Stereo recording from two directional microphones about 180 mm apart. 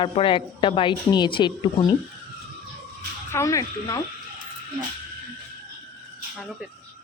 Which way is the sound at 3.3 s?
15° left (ahead or behind).